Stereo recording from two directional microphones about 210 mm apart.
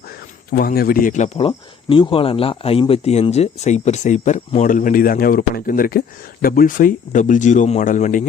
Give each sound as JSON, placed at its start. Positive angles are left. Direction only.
{"t": 0.5, "sound": "speech", "side_deg": 45}